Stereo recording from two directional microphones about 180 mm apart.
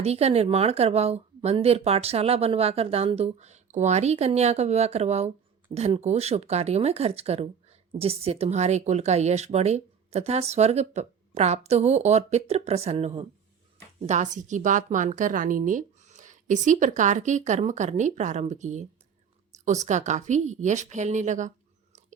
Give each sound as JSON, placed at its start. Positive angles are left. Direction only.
{"t": 0.0, "sound": "a woman's voice", "side_deg": -35}